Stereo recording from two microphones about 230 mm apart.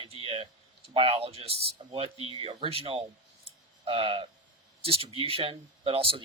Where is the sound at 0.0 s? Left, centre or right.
Right.